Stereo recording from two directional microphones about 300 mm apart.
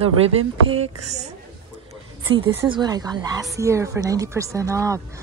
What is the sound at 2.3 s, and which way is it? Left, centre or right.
Speech, centre.